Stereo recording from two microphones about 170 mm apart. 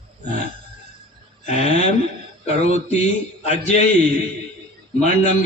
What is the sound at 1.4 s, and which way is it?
A man's voice, 40° left (ahead or behind).